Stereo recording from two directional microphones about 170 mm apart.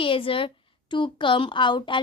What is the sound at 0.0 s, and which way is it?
A woman's voice, 30° left (ahead or behind).